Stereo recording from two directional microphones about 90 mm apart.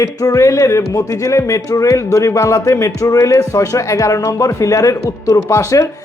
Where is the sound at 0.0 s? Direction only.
40° left (ahead or behind).